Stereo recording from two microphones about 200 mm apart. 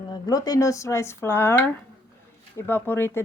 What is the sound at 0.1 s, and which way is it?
A woman's voice, 20° left (ahead or behind).